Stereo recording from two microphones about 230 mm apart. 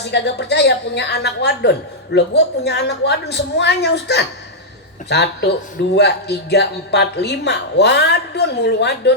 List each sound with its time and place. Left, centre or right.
0.0 s speech: left